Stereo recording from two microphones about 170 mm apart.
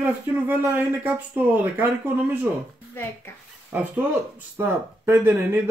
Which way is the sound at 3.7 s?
10° right (ahead or behind).